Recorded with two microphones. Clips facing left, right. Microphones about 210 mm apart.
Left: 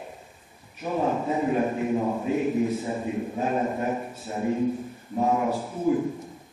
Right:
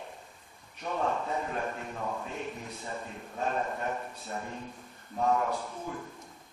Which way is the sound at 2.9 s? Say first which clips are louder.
Left 12 dB; 15° left (ahead or behind).